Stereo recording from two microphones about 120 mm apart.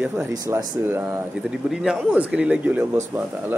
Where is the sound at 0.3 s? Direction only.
30° right (ahead or behind).